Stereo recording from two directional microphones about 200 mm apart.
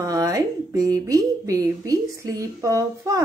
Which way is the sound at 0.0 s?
15° right (ahead or behind).